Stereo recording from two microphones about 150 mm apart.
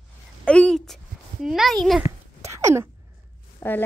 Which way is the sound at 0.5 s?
5° left (ahead or behind).